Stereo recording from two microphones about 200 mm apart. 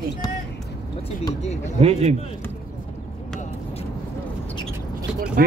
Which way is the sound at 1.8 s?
30° right (ahead or behind).